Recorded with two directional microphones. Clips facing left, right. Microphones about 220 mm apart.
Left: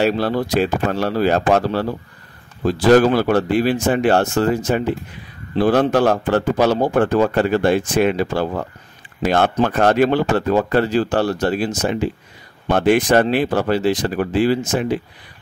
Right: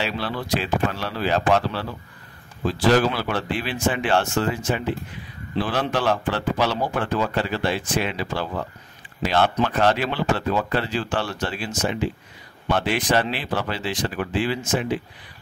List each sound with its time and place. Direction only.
0.0 s a man's voice: 45° left (ahead or behind)